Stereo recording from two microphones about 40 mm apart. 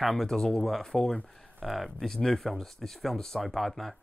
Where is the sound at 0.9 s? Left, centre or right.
Centre.